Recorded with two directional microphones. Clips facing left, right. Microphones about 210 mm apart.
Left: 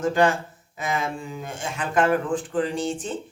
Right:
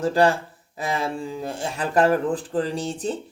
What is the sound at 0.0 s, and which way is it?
A man's voice, 35° right (ahead or behind).